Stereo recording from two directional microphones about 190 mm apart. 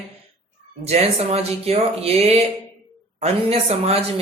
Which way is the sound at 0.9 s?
35° right (ahead or behind).